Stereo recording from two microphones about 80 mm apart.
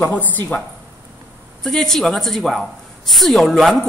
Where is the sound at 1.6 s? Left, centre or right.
Centre.